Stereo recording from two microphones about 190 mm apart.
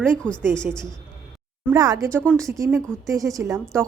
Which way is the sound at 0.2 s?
5° left (ahead or behind).